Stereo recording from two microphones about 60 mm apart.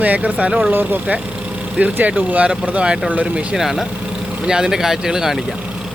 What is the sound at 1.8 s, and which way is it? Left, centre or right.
Speech, right.